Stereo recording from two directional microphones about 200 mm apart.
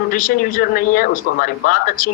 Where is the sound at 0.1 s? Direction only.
45° left (ahead or behind).